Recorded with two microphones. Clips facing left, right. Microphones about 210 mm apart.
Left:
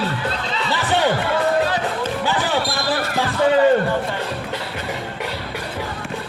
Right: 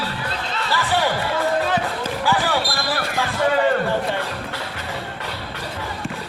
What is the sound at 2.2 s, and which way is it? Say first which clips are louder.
Basketball bounce: right 4 dB; 20° left (ahead or behind).